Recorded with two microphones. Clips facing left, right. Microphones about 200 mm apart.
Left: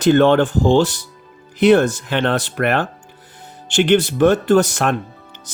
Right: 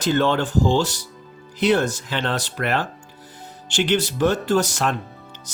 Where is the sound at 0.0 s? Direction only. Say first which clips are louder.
Left 7 dB; 55° left (ahead or behind).